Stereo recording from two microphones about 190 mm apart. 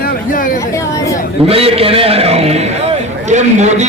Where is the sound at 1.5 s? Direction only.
30° right (ahead or behind).